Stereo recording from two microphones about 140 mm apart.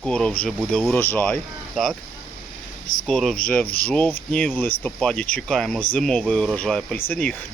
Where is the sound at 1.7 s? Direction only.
Centre (ahead or behind).